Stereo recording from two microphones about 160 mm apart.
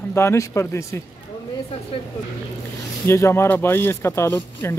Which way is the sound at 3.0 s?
15° left (ahead or behind).